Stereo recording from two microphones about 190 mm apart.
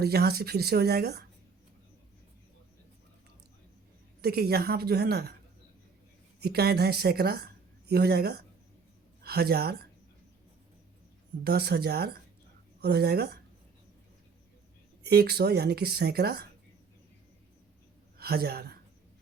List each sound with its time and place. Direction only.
0.0 s speech: 55° right (ahead or behind)
4.2 s speech: 55° right (ahead or behind)
6.4 s a woman's voice: 55° right (ahead or behind)
11.4 s speech: 60° right (ahead or behind)
15.0 s speech: 55° right (ahead or behind)
18.2 s a woman's voice: 55° right (ahead or behind)